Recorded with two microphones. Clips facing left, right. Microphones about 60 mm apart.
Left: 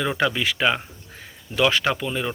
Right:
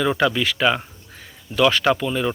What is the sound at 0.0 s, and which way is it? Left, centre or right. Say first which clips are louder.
Speech: right 3 dB; centre.